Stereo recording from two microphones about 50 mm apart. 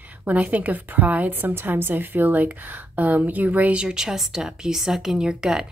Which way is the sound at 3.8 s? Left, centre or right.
Centre.